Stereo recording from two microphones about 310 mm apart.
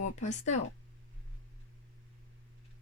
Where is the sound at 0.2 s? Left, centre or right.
Left.